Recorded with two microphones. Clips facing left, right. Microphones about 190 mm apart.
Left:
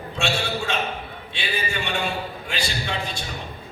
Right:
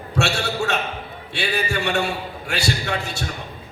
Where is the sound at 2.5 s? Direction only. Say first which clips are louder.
Right 5 dB; 70° right (ahead or behind).